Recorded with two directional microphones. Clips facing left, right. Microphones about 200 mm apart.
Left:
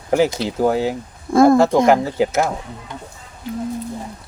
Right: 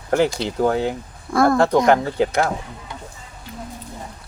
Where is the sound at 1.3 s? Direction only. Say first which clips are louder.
Left 5 dB; 25° left (ahead or behind).